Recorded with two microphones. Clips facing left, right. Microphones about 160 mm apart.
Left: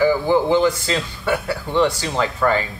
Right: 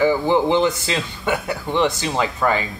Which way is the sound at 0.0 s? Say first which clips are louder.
Even; 20° right (ahead or behind).